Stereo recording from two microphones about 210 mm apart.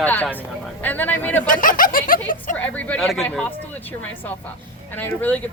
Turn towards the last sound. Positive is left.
turn(degrees=10)  # may be behind; listen again after turning